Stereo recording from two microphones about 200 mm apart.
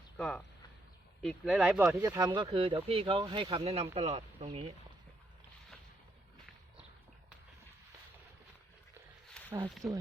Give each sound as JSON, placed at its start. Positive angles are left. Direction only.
{"t": 0.2, "sound": "speech", "side_deg": 5}
{"t": 1.9, "sound": "speech", "side_deg": -15}
{"t": 9.6, "sound": "speech", "side_deg": 0}